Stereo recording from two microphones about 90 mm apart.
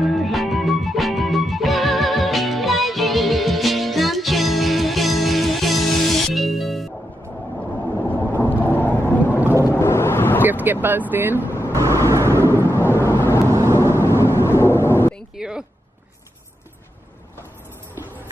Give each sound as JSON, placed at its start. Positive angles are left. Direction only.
{"t": 0.0, "sound": "music", "side_deg": 0}
{"t": 8.1, "sound": "boat", "side_deg": 20}
{"t": 9.6, "sound": "a sound", "side_deg": 30}
{"t": 10.4, "sound": "vehicle", "side_deg": -20}
{"t": 11.7, "sound": "vehicle", "side_deg": -35}
{"t": 12.4, "sound": "thunder", "side_deg": 25}
{"t": 12.9, "sound": "vehicle", "side_deg": 25}
{"t": 13.5, "sound": "vehicle", "side_deg": -35}
{"t": 14.2, "sound": "a sound", "side_deg": 30}
{"t": 15.3, "sound": "a sound", "side_deg": -10}